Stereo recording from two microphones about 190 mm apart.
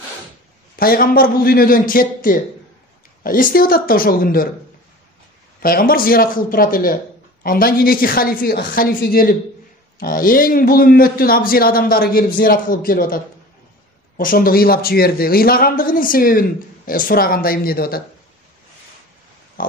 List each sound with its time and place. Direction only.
0.7 s a man's voice: 50° left (ahead or behind)
5.6 s a man's voice: 50° left (ahead or behind)